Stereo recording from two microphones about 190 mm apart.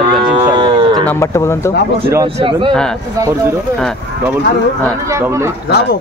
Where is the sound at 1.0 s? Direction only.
15° left (ahead or behind).